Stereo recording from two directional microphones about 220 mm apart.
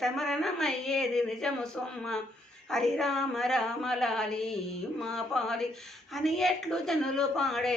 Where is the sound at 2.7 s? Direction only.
Centre (ahead or behind).